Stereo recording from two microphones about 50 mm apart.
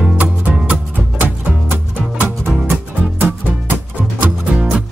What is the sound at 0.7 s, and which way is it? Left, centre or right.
Music, right.